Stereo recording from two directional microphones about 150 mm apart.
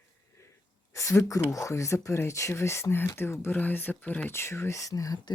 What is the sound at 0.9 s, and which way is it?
Speech, 20° left (ahead or behind).